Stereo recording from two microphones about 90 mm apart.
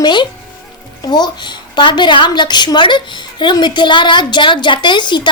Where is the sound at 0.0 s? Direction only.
55° left (ahead or behind).